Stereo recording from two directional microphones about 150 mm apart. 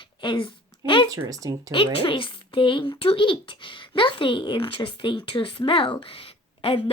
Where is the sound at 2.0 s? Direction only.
35° left (ahead or behind).